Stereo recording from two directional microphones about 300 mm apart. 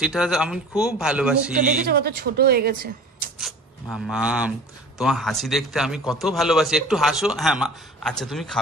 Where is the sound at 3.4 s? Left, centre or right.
Centre.